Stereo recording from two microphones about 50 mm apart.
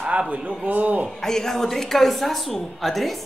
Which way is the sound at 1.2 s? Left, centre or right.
Centre.